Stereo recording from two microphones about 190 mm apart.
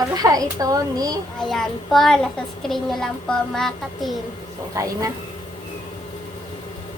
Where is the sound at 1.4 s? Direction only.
Centre (ahead or behind).